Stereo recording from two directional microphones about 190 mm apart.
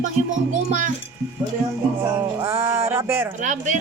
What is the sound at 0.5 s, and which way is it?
Speech, 45° right (ahead or behind).